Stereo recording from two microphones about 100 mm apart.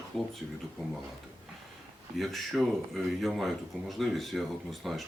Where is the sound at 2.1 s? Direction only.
Centre (ahead or behind).